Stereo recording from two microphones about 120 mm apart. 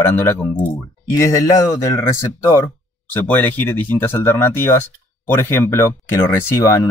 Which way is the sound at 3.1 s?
15° left (ahead or behind).